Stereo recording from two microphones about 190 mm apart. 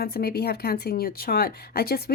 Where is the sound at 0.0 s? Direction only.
55° left (ahead or behind).